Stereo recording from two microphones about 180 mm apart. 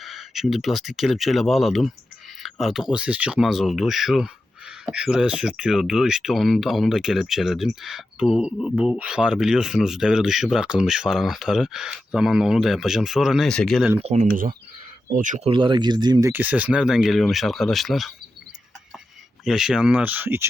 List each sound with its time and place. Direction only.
0.0 s speech: centre (ahead or behind)
14.0 s speech: 40° right (ahead or behind)
15.4 s speech: 25° right (ahead or behind)
16.3 s speech: 10° right (ahead or behind)
19.5 s speech: 5° right (ahead or behind)